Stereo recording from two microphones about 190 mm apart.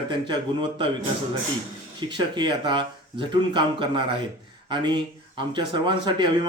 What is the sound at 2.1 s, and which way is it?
Speech, 25° right (ahead or behind).